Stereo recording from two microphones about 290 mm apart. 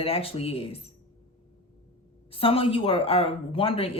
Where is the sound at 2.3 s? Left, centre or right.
Centre.